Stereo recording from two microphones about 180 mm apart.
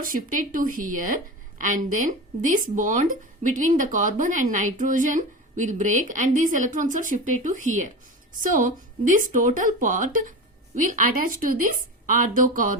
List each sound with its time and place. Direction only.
0.0 s a woman's voice: 50° right (ahead or behind)